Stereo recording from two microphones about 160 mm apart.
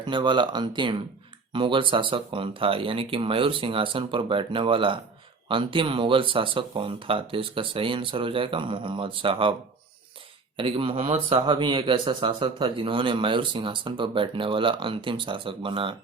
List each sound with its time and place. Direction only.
0.0 s speech: 30° right (ahead or behind)
10.6 s speech: 35° right (ahead or behind)